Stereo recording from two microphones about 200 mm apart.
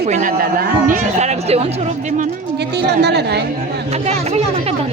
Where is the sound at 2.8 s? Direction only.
55° right (ahead or behind).